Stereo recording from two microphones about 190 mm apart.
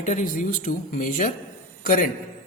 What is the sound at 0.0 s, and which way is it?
A man's voice, 40° left (ahead or behind).